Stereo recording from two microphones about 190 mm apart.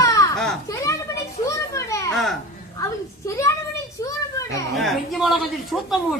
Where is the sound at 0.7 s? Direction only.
15° left (ahead or behind).